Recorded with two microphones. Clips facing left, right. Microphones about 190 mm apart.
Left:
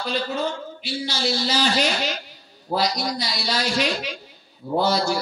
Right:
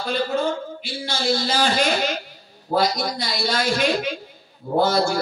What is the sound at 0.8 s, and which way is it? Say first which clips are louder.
Speech: right 1 dB; 50° right (ahead or behind).